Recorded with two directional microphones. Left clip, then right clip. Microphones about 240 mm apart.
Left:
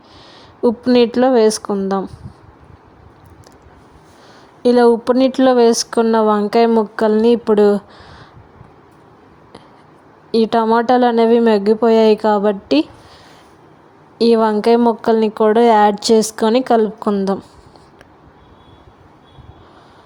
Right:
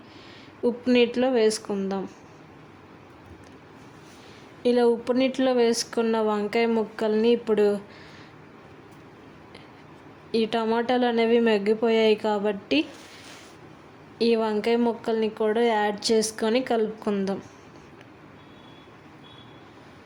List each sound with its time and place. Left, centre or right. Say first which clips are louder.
0.6 s speech: left 8 dB; left
4.6 s speech: left 10 dB; left
10.3 s speech: left 11 dB; left
14.2 s speech: left 10 dB; left